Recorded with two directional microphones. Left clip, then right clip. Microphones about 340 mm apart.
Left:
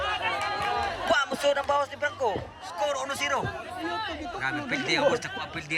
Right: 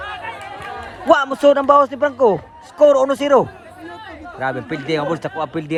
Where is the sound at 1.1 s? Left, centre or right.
Centre.